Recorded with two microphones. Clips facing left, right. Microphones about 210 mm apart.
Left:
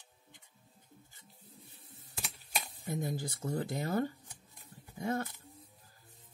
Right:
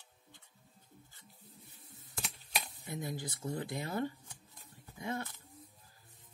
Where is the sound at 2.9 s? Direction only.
45° left (ahead or behind).